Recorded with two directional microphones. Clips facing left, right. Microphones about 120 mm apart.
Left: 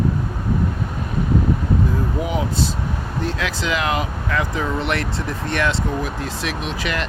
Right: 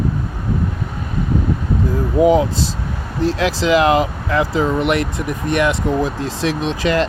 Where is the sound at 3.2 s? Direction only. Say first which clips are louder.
Right 8 dB; 35° right (ahead or behind); by 5.7 s 15° right (ahead or behind).